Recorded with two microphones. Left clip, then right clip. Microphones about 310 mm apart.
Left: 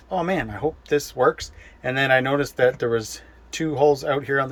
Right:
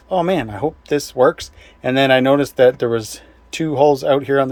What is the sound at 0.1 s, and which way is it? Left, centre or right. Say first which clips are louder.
Speech: right 6 dB; right.